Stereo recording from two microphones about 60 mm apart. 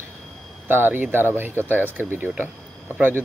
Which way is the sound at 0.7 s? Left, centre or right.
Right.